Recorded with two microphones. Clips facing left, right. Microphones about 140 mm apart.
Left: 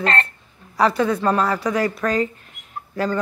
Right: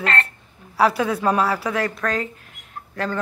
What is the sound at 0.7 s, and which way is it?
Speech, 10° right (ahead or behind).